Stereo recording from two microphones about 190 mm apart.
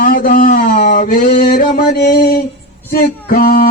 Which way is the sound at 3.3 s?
50° left (ahead or behind).